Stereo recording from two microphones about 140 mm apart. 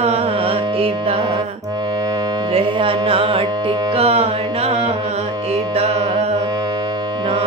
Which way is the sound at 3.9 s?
50° right (ahead or behind).